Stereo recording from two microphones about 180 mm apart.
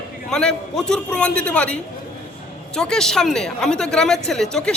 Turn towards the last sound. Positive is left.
turn(degrees=5)  # may be behind; listen again after turning